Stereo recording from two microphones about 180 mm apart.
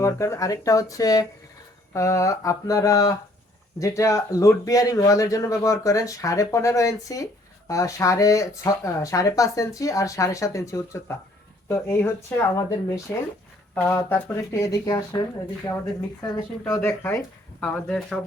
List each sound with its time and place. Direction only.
0.0 s speech: 15° left (ahead or behind)
13.7 s speech: 10° left (ahead or behind)
16.2 s speech: 15° left (ahead or behind)